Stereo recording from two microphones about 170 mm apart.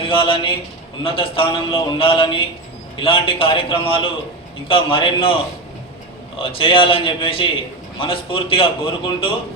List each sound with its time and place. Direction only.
0.0 s a man's voice: 30° left (ahead or behind)
6.4 s a man's voice: 30° left (ahead or behind)